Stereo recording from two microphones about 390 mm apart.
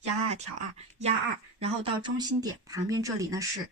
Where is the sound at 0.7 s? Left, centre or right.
Centre.